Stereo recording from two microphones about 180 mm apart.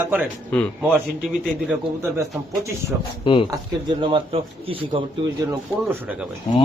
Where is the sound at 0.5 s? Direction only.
5° left (ahead or behind).